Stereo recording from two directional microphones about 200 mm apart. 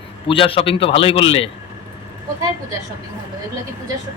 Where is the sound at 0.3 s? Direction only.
25° left (ahead or behind).